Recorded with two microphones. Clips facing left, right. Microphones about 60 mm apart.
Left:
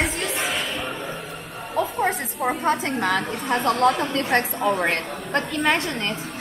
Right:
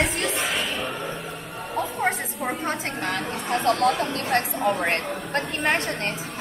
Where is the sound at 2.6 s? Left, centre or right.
Left.